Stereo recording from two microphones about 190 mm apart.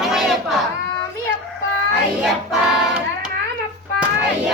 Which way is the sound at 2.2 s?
Centre (ahead or behind).